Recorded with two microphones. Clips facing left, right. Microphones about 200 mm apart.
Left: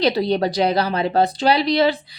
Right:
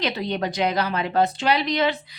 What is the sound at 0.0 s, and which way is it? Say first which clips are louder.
A woman's voice: left 7 dB; 35° left (ahead or behind).